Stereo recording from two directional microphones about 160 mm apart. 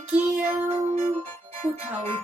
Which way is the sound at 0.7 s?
40° right (ahead or behind).